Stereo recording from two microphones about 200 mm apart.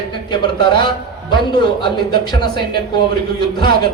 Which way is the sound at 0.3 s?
20° left (ahead or behind).